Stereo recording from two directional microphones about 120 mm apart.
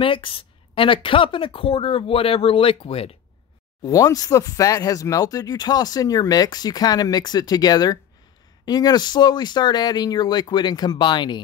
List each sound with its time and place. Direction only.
0.0 s a woman's voice: 45° left (ahead or behind)
3.8 s speech: 30° left (ahead or behind)